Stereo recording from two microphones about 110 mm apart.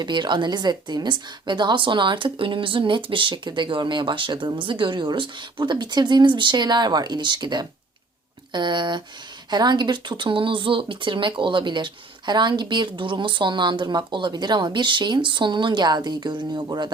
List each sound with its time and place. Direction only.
0.0 s a woman's voice: 40° right (ahead or behind)